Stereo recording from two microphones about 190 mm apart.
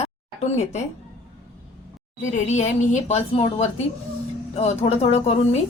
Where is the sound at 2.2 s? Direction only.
40° left (ahead or behind).